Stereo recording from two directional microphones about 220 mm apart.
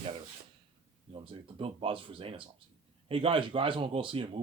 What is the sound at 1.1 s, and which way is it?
Speech, 25° right (ahead or behind).